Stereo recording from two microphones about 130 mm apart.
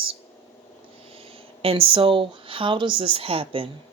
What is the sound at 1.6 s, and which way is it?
Speech, 45° right (ahead or behind).